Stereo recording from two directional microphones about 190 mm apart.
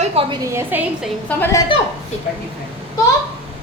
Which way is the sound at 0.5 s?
10° right (ahead or behind).